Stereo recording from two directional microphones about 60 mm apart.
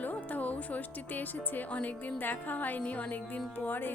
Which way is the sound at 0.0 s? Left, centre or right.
Left.